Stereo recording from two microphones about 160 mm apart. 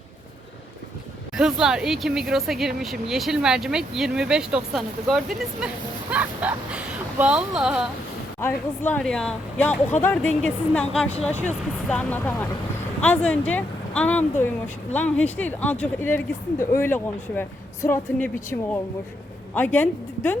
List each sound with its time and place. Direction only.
1.4 s speech: 5° right (ahead or behind)
8.4 s speech: 15° left (ahead or behind)